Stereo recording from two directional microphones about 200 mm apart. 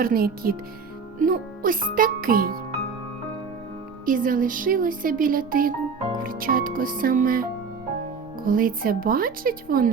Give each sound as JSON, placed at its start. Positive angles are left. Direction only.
{"t": 0.0, "sound": "speech", "side_deg": -45}
{"t": 4.0, "sound": "speech", "side_deg": -45}
{"t": 8.4, "sound": "speech", "side_deg": -45}